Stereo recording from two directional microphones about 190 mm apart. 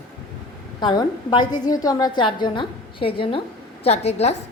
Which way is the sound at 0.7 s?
20° left (ahead or behind).